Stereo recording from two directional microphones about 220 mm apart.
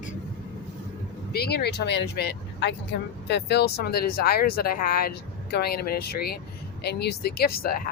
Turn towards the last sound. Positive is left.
turn(degrees=40)  # may be behind; listen again after turning